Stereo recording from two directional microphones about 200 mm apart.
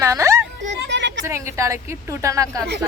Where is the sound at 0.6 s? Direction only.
65° right (ahead or behind).